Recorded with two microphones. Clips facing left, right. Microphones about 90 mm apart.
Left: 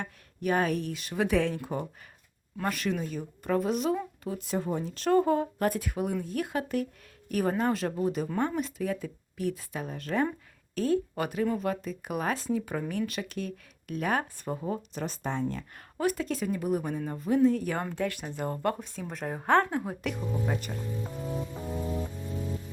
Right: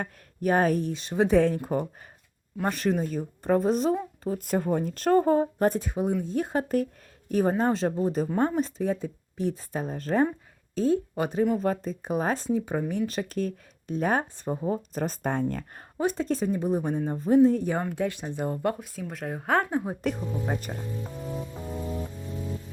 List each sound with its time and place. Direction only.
0.0 s speech: 40° right (ahead or behind)
7.3 s speech: 25° right (ahead or behind)
10.8 s speech: 20° right (ahead or behind)
13.1 s speech: 35° right (ahead or behind)
14.4 s speech: 20° right (ahead or behind)
14.8 s speech: 40° right (ahead or behind)
16.0 s speech: 30° right (ahead or behind)
17.9 s speech: 20° right (ahead or behind)
20.0 s speech: 35° right (ahead or behind)
21.2 s music: centre (ahead or behind)